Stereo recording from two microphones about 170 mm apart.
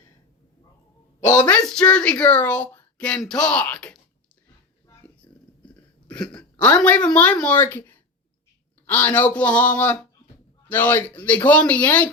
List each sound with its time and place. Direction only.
1.2 s speech: 15° left (ahead or behind)
1.5 s speech: 5° left (ahead or behind)
5.2 s a sound: 30° left (ahead or behind)
6.2 s speech: 5° left (ahead or behind)